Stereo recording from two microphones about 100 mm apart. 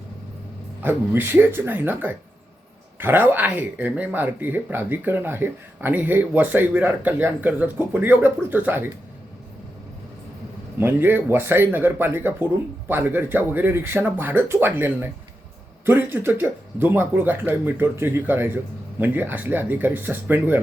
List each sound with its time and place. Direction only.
0.8 s speech: 20° right (ahead or behind)
10.8 s speech: 20° right (ahead or behind)